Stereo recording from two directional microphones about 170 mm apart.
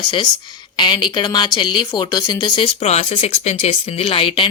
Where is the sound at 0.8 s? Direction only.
25° left (ahead or behind).